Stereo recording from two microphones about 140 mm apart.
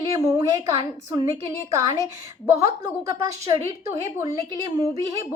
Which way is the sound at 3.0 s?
20° right (ahead or behind).